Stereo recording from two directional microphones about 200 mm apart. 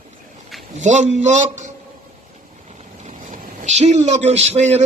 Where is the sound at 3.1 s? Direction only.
35° right (ahead or behind).